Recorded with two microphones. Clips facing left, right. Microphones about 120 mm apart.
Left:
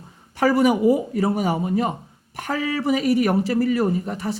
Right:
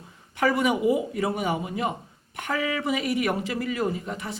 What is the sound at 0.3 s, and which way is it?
A man's voice, 35° left (ahead or behind).